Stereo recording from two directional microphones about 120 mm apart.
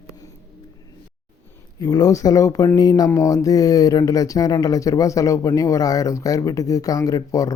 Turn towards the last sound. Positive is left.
turn(degrees=30)  # may be behind; listen again after turning